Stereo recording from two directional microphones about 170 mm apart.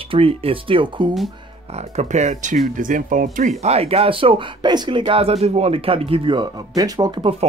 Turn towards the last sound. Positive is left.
turn(degrees=-25)  # may be behind; listen again after turning